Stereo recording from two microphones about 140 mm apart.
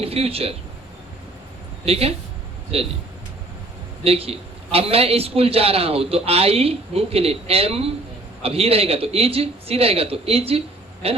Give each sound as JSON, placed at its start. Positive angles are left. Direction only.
{"t": 0.0, "sound": "a man's voice", "side_deg": -45}
{"t": 1.8, "sound": "a man's voice", "side_deg": -45}
{"t": 4.0, "sound": "a man's voice", "side_deg": -45}